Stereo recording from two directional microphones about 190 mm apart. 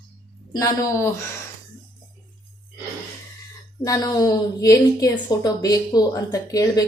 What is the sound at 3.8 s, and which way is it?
A woman's voice, 15° left (ahead or behind).